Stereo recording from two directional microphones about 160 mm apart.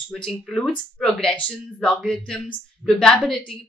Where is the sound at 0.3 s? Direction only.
Centre (ahead or behind).